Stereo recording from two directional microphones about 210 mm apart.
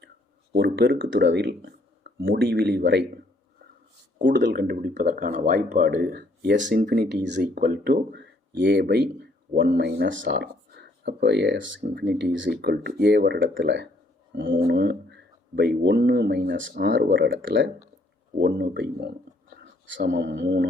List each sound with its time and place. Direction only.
0.5 s speech: 50° right (ahead or behind)
4.2 s speech: 55° right (ahead or behind)
4.5 s speech: 45° right (ahead or behind); by 14.8 s 60° right (ahead or behind)
14.8 s speech: 50° right (ahead or behind)
17.0 s speech: 45° right (ahead or behind)
17.2 s speech: 60° right (ahead or behind)
20.1 s speech: 60° right (ahead or behind)